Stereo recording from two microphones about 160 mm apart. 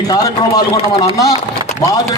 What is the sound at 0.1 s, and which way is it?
A man's voice, 25° left (ahead or behind).